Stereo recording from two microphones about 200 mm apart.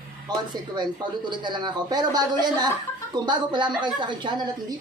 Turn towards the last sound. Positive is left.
turn(degrees=-20)  # may be behind; listen again after turning